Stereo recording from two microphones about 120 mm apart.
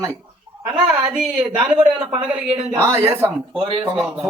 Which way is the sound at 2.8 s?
20° right (ahead or behind).